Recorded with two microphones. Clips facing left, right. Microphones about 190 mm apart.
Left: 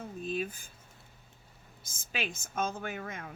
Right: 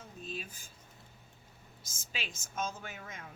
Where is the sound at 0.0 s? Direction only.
55° left (ahead or behind).